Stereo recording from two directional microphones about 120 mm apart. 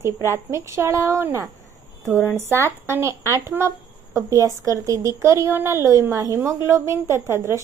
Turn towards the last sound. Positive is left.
turn(degrees=-20)  # may be behind; listen again after turning